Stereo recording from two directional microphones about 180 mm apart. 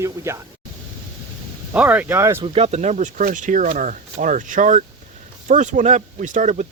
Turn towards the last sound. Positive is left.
turn(degrees=-40)  # may be behind; listen again after turning